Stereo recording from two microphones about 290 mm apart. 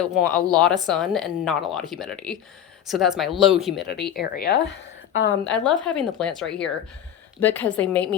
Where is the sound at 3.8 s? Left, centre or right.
Left.